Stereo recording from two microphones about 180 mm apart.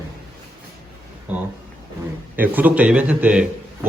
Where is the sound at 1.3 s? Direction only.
10° right (ahead or behind).